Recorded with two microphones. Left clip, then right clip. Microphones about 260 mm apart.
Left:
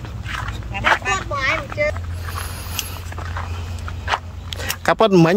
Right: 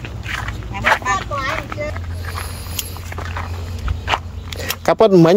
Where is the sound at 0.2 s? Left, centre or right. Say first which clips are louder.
Right 2 dB; right.